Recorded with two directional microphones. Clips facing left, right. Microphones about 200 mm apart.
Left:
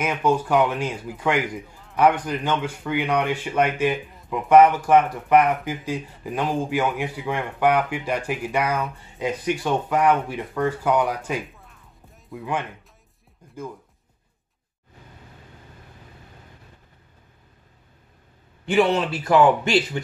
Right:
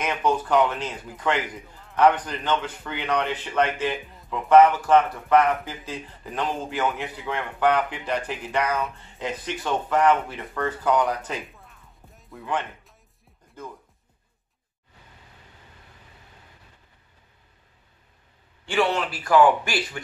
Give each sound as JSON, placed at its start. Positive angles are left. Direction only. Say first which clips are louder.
{"t": 0.0, "sound": "speech", "louder": "left 3 dB", "side_deg": 10}
{"t": 11.5, "sound": "music", "louder": "left 1 dB", "side_deg": 0}
{"t": 18.7, "sound": "a man's voice", "louder": "left 4 dB", "side_deg": 20}